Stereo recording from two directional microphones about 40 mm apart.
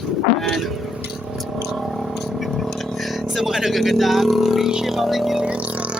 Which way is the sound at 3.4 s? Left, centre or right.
Centre.